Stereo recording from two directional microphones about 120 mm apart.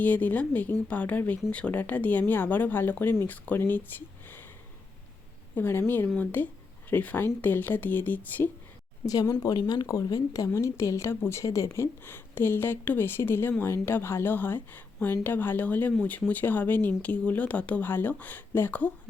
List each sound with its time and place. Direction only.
0.0 s speech: 15° left (ahead or behind)
5.5 s a woman's voice: 20° left (ahead or behind)
9.0 s speech: 30° left (ahead or behind); by 18.9 s 15° left (ahead or behind)